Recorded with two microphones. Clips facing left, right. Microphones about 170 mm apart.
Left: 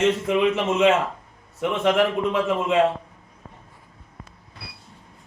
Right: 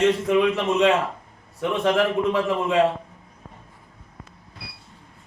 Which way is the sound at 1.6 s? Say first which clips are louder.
Left 1 dB; centre (ahead or behind).